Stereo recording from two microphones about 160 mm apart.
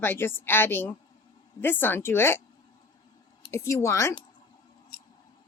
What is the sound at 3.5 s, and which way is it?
Speech, 15° left (ahead or behind).